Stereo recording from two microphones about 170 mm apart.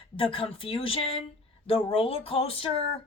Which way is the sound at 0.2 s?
30° left (ahead or behind).